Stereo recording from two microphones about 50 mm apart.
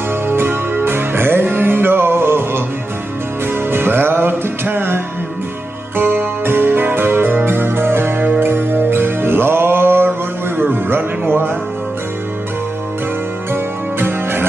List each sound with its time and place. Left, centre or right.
0.3 s music: right
3.7 s music: right
8.2 s music: right
8.5 s music: right
13.5 s music: right